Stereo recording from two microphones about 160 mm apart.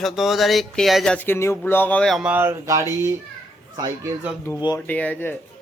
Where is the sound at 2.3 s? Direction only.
15° right (ahead or behind).